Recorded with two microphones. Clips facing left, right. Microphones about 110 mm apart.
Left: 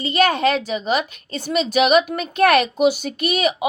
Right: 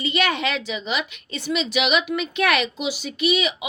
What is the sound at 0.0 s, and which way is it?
A woman's voice, 40° left (ahead or behind).